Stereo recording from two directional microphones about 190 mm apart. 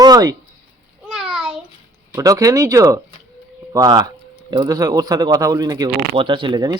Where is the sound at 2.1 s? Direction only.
15° right (ahead or behind).